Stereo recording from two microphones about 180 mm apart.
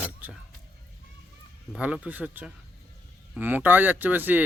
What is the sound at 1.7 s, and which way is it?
Speech, 5° right (ahead or behind).